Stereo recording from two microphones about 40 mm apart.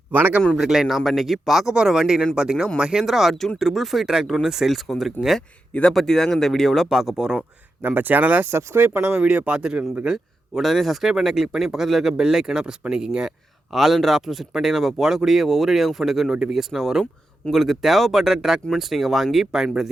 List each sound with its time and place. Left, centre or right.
0.5 s speech: centre
1.6 s a man's voice: centre
3.1 s speech: centre
4.0 s speech: centre
6.8 s speech: centre
7.8 s speech: right
8.4 s speech: right
9.2 s a man's voice: right
10.5 s a man's voice: centre; by 13.1 s right
13.7 s speech: centre